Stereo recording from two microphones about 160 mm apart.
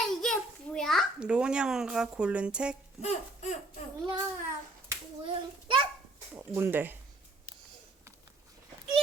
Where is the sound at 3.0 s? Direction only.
45° left (ahead or behind).